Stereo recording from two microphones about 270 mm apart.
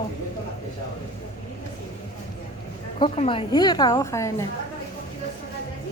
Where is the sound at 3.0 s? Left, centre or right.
Centre.